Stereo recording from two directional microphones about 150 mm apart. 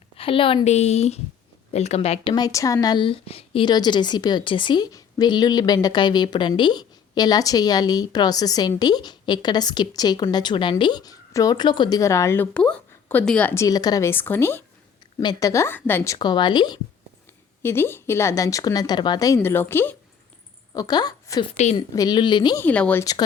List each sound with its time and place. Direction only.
0.2 s a woman's voice: 35° left (ahead or behind)
2.3 s a woman's voice: 25° left (ahead or behind)
15.2 s a woman's voice: 25° left (ahead or behind)
16.1 s speech: 30° left (ahead or behind)
17.6 s speech: 15° left (ahead or behind)
20.7 s a woman's voice: 25° left (ahead or behind)
21.5 s a woman's voice: 50° left (ahead or behind)
21.8 s a woman's voice: 25° left (ahead or behind)
22.6 s speech: 10° left (ahead or behind)